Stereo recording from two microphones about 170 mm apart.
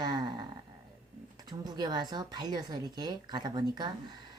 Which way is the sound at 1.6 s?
25° right (ahead or behind).